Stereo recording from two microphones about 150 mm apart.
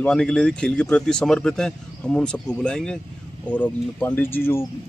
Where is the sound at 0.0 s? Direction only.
5° left (ahead or behind).